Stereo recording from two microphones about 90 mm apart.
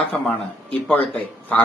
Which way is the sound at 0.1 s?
15° left (ahead or behind).